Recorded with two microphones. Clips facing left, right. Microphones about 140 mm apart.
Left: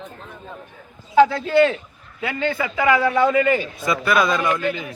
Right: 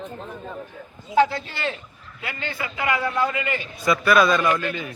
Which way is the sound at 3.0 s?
70° left (ahead or behind).